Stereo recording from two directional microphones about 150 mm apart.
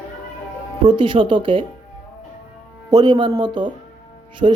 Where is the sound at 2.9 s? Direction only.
30° right (ahead or behind).